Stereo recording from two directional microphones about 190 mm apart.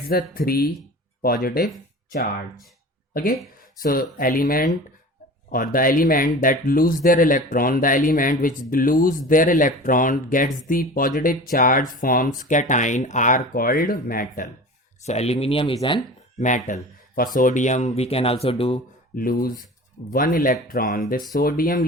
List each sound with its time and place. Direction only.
0.1 s speech: 50° left (ahead or behind)
3.1 s speech: 50° left (ahead or behind)
15.0 s speech: 35° left (ahead or behind)
16.4 s speech: 40° left (ahead or behind)
19.1 s speech: 50° left (ahead or behind)